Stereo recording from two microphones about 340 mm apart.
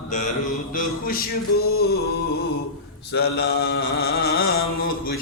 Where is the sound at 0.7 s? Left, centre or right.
Left.